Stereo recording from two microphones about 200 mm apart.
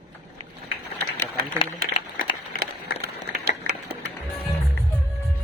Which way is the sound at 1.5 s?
25° left (ahead or behind).